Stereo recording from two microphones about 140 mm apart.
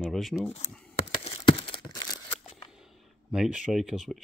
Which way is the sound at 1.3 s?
40° left (ahead or behind).